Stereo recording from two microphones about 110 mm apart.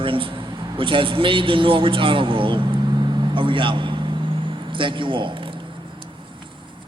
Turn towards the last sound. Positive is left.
turn(degrees=-50)  # may be behind; listen again after turning